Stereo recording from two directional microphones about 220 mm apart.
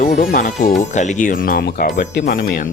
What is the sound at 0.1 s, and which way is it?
Speech, 40° left (ahead or behind).